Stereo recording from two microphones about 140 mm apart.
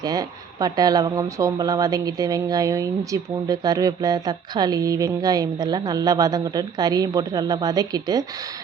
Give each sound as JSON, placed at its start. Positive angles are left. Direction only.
{"t": 0.0, "sound": "speech", "side_deg": -25}